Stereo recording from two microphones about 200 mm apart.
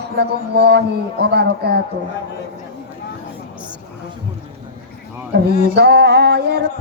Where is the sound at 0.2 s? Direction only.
55° right (ahead or behind).